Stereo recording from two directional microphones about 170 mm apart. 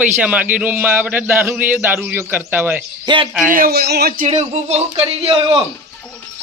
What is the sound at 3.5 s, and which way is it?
Speech, 60° right (ahead or behind).